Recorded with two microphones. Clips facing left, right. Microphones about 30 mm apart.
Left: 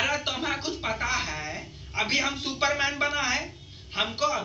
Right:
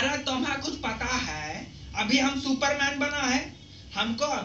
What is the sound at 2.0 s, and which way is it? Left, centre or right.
A woman's voice, centre.